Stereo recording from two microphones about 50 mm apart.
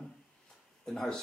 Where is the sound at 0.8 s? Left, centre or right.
Centre.